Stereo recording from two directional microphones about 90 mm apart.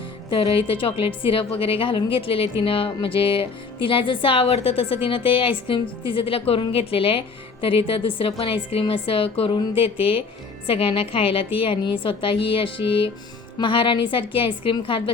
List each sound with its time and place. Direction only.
0.3 s a woman's voice: 80° left
13.6 s a woman's voice: 70° left (ahead or behind)